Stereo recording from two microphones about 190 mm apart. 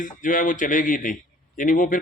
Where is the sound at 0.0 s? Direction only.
45° left (ahead or behind).